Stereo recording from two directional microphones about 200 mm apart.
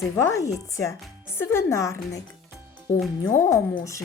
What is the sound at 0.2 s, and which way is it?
Speech, 15° left (ahead or behind).